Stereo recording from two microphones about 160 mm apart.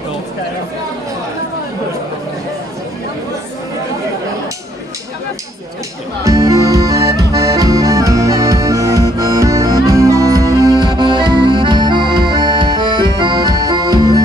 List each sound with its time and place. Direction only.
6.2 s accordion: 20° right (ahead or behind)